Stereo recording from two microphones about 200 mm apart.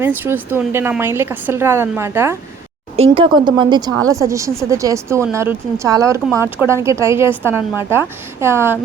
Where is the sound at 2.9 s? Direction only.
30° right (ahead or behind).